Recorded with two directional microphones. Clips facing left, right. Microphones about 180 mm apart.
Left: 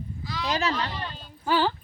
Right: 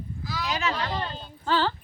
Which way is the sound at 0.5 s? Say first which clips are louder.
Left 3 dB; 35° left (ahead or behind).